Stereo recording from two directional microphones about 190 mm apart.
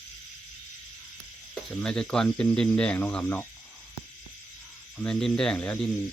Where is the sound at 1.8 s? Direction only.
5° left (ahead or behind).